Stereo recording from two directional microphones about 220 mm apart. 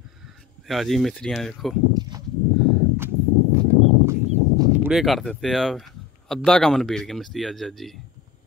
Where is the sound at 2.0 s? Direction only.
20° right (ahead or behind).